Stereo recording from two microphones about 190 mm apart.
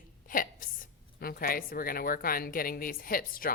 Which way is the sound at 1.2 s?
50° left (ahead or behind).